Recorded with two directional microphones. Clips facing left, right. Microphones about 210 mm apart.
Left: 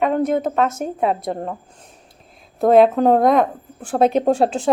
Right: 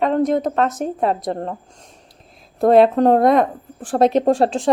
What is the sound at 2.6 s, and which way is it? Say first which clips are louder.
A woman's voice: even; centre (ahead or behind).